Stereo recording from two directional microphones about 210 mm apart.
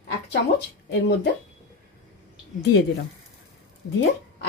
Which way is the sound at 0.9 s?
55° left (ahead or behind).